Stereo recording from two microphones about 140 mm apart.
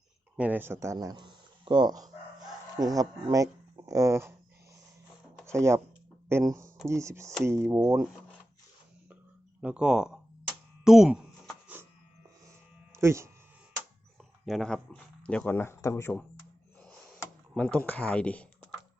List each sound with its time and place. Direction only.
0.3 s speech: 10° right (ahead or behind)
5.5 s speech: 20° right (ahead or behind)
7.8 s speech: 5° right (ahead or behind)
9.6 s speech: 5° right (ahead or behind)
10.8 s a sound: 5° right (ahead or behind)
12.9 s a sound: 20° right (ahead or behind)
14.4 s speech: centre (ahead or behind); by 16.2 s 20° left (ahead or behind)
17.5 s speech: 5° left (ahead or behind)